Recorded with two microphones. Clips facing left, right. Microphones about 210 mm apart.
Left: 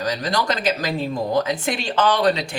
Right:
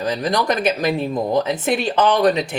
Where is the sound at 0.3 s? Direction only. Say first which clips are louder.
Right 4 dB; 20° right (ahead or behind).